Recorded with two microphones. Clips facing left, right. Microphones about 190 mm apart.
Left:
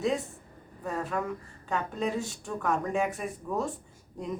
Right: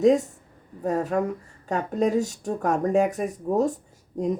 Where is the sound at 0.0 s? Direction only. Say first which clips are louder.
Right 10 dB; 45° right (ahead or behind).